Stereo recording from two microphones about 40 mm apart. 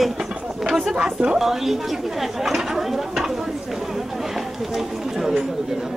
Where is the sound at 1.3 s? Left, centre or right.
Centre.